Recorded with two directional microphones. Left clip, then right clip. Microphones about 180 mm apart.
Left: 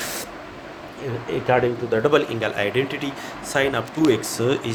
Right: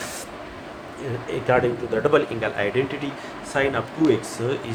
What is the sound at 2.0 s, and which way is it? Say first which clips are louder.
Speech: even; 45° left (ahead or behind).